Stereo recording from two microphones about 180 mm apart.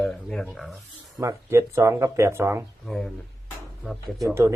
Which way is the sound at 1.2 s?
15° right (ahead or behind).